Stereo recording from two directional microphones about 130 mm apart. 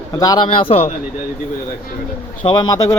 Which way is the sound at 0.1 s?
30° left (ahead or behind).